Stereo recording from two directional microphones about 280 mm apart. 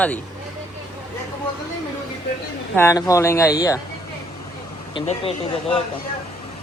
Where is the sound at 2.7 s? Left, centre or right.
Centre.